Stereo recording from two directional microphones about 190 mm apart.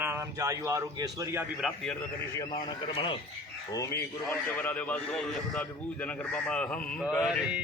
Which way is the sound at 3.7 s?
15° left (ahead or behind).